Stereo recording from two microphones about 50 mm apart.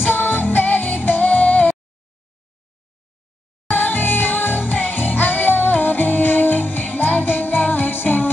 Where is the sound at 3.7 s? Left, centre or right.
Left.